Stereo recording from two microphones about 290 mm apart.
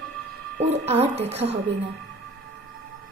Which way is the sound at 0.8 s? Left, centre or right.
Right.